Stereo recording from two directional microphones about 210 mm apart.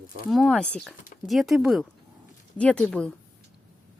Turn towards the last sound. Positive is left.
turn(degrees=5)  # may be behind; listen again after turning